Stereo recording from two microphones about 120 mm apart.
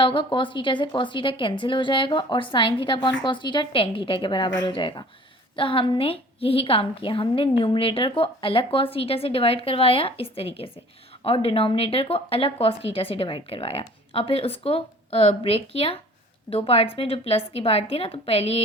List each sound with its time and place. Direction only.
0.0 s a woman's voice: 45° left (ahead or behind)